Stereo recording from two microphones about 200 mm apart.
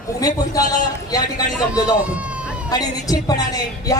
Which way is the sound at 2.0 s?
5° right (ahead or behind).